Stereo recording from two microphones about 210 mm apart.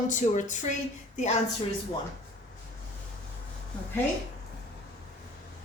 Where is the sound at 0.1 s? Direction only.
35° left (ahead or behind).